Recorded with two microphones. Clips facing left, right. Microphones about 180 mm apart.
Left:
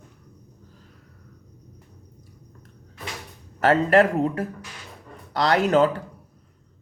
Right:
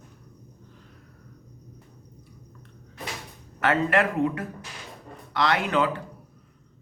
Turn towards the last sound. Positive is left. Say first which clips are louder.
# left 6 dB
turn(degrees=40)  # may be behind; listen again after turning